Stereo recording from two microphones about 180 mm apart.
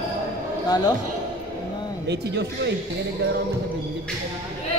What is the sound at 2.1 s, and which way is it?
Speech, 70° right (ahead or behind).